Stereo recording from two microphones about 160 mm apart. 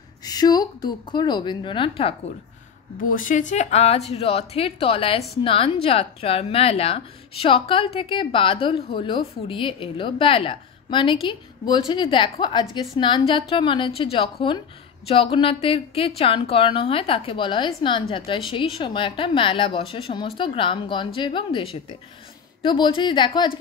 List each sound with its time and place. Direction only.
0.2 s a woman's voice: 25° left (ahead or behind)
3.0 s a woman's voice: 60° left (ahead or behind); by 23.6 s 30° left (ahead or behind)